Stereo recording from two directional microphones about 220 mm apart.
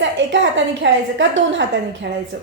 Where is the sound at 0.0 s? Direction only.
55° right (ahead or behind).